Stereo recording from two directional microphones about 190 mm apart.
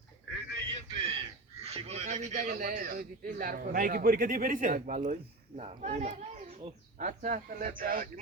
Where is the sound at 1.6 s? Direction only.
35° right (ahead or behind).